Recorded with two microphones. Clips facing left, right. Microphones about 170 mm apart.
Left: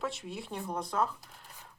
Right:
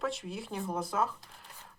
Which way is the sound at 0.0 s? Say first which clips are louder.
Right 2 dB; centre (ahead or behind).